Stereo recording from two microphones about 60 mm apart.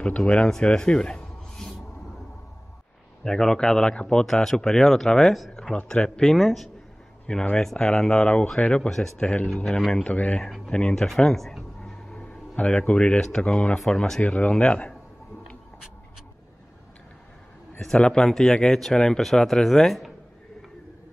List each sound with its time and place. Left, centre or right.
0.0 s a man's voice: centre
3.3 s speech: centre
6.3 s speech: centre
7.2 s speech: centre
9.8 s speech: centre
10.0 s speech: left
11.1 s a sound: centre
12.3 s speech: left
14.2 s speech: left
17.7 s speech: centre